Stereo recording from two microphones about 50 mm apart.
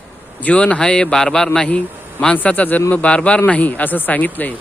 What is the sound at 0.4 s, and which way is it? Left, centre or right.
A man's voice, left.